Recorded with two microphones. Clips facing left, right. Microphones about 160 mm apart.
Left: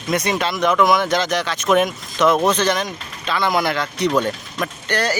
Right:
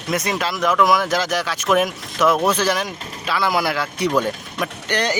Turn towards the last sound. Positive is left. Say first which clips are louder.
# even
turn(degrees=-15)  # may be behind; listen again after turning